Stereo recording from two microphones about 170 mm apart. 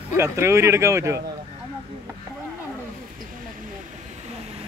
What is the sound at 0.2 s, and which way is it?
A man's voice, 15° right (ahead or behind).